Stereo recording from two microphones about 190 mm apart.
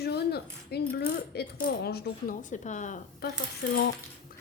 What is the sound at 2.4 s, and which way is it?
Speech, 40° left (ahead or behind).